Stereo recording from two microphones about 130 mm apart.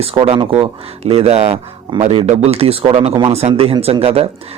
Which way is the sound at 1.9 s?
40° right (ahead or behind).